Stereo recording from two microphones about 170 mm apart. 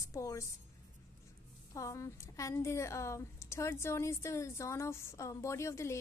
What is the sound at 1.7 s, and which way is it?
A woman's voice, 20° left (ahead or behind).